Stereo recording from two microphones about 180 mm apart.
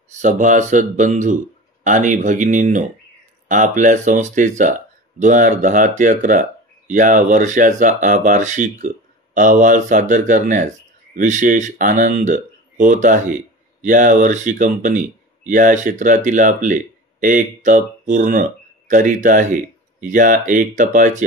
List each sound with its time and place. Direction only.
0.1 s speech: 45° right (ahead or behind)